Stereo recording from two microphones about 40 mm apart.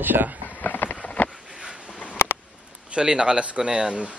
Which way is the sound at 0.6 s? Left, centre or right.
Left.